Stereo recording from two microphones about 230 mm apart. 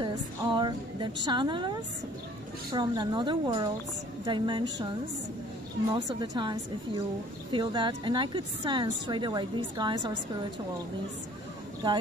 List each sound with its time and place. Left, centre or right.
0.0 s a sound: centre
1.2 s a woman's voice: centre
5.9 s a woman's voice: centre